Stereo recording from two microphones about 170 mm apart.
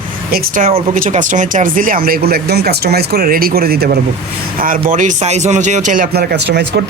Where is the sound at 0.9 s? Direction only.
50° right (ahead or behind); by 3.9 s 65° right (ahead or behind).